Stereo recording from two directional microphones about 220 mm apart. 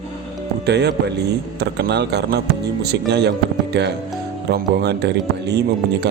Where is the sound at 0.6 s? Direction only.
50° right (ahead or behind).